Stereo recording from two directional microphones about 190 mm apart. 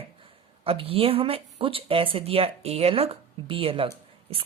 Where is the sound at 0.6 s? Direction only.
30° right (ahead or behind).